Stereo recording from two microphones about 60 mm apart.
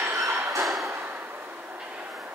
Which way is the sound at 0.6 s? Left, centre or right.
Centre.